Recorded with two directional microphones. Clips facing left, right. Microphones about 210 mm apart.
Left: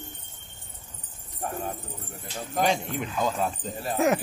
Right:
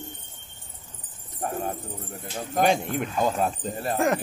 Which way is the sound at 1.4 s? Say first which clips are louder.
Right 3 dB; 50° right (ahead or behind).